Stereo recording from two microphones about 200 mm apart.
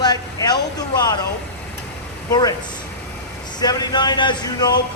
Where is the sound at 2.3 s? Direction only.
20° left (ahead or behind).